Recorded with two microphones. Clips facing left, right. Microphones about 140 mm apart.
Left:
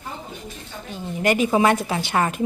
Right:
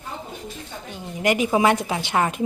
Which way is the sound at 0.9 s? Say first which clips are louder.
Left 1 dB; 15° right (ahead or behind).